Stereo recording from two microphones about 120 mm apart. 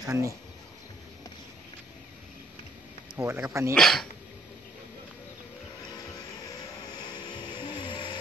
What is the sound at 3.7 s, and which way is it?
Speech, 5° left (ahead or behind).